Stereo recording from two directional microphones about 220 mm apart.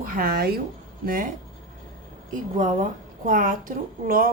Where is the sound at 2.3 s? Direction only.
35° right (ahead or behind).